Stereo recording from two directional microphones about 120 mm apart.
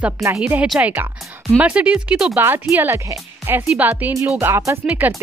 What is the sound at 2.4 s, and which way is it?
Speech, 20° right (ahead or behind).